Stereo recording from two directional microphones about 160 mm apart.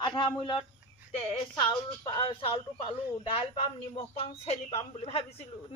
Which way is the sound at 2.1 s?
35° left (ahead or behind).